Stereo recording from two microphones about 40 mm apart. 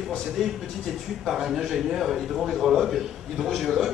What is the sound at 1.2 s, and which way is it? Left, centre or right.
A man's voice, centre.